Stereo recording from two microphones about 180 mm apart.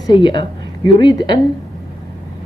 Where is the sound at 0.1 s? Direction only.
25° left (ahead or behind).